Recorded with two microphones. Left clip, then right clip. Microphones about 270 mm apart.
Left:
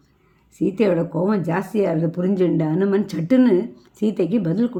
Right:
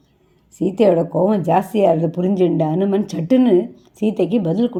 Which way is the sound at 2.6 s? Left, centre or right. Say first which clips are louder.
Right 2 dB; centre.